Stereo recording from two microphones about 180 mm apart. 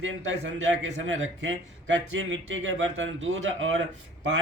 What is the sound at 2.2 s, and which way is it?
Speech, 90° right.